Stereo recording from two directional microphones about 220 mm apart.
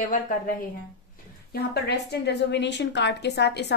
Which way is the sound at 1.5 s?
50° left (ahead or behind).